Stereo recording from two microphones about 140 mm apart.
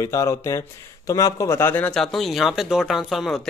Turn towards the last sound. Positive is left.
turn(degrees=0)  # may be behind; listen again after turning